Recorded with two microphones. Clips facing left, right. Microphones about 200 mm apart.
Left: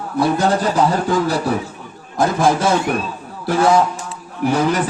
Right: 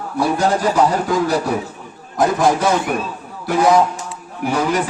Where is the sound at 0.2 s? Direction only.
15° right (ahead or behind).